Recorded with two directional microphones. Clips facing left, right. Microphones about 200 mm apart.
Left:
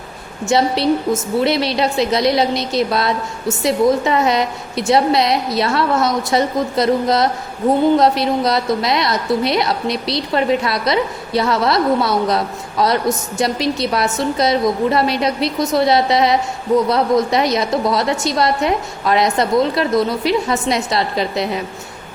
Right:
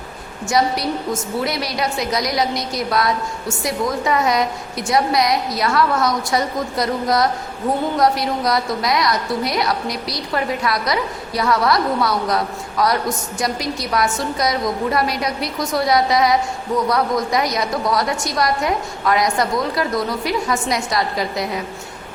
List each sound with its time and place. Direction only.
0.4 s a woman's voice: 25° left (ahead or behind)